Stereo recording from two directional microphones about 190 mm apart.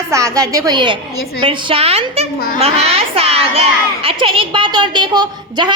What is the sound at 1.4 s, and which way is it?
A woman's voice, 25° right (ahead or behind).